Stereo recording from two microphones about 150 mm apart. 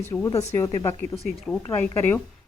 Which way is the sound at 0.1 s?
20° left (ahead or behind).